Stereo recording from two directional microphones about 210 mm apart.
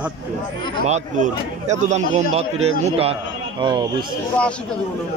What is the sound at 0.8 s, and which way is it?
A man's voice, 35° right (ahead or behind).